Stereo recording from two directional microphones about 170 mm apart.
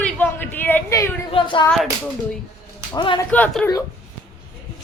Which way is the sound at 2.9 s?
30° left (ahead or behind).